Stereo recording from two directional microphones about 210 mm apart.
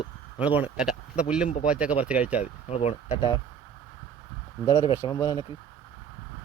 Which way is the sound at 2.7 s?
30° left (ahead or behind).